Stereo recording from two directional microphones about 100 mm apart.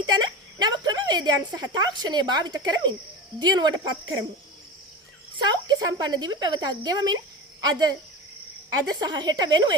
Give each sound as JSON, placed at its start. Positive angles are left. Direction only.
{"t": 0.0, "sound": "a woman's voice", "side_deg": -45}
{"t": 5.4, "sound": "speech", "side_deg": -45}
{"t": 9.0, "sound": "speech", "side_deg": -45}